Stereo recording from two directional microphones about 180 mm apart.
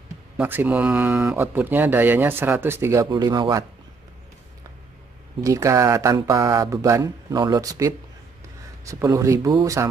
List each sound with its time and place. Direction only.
0.4 s speech: 10° right (ahead or behind)
5.4 s speech: 15° right (ahead or behind)